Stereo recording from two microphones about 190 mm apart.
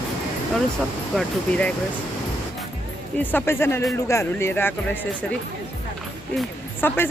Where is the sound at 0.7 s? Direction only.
5° left (ahead or behind).